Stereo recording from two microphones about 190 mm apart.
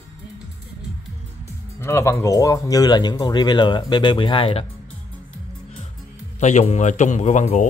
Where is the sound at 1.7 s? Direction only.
15° left (ahead or behind).